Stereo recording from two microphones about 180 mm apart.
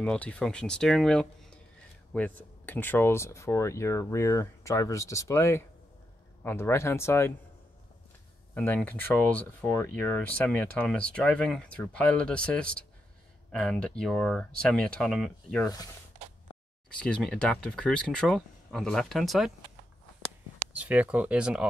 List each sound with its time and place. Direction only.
0.0 s speech: 5° left (ahead or behind)
8.5 s speech: 10° left (ahead or behind)
16.9 s speech: 5° left (ahead or behind)
20.7 s speech: 10° right (ahead or behind)